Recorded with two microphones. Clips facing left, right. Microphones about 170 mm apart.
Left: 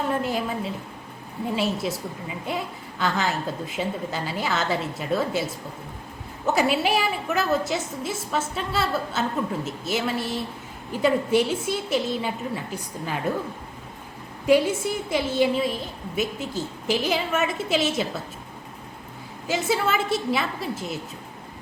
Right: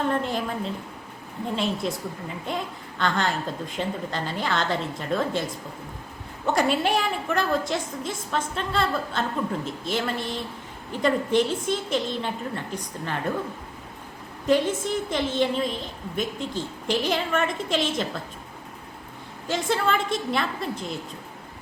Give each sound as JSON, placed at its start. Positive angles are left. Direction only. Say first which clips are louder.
{"t": 0.1, "sound": "a woman's voice", "louder": "left 1 dB", "side_deg": 5}
{"t": 14.4, "sound": "a woman's voice", "louder": "left 2 dB", "side_deg": 10}
{"t": 19.5, "sound": "a child's voice", "louder": "left 1 dB", "side_deg": 5}